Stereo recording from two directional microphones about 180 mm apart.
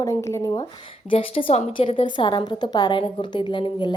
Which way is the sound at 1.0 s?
30° left (ahead or behind).